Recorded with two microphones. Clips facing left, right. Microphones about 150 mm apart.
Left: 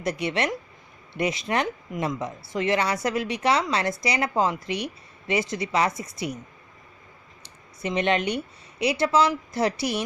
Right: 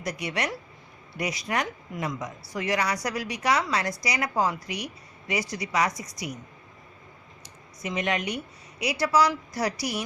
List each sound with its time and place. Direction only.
0.0 s speech: 25° left (ahead or behind)
7.8 s speech: 30° left (ahead or behind)